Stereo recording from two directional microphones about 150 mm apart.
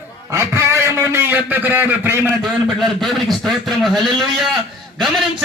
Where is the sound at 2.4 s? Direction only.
Centre (ahead or behind).